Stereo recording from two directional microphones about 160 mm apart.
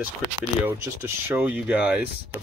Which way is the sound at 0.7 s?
15° right (ahead or behind).